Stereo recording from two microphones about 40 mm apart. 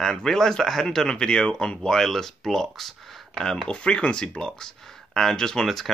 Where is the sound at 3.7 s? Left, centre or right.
Left.